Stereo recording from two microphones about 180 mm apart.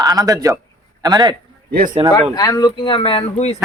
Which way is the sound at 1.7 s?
55° right (ahead or behind).